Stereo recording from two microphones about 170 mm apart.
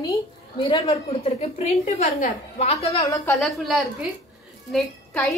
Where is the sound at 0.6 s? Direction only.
35° left (ahead or behind).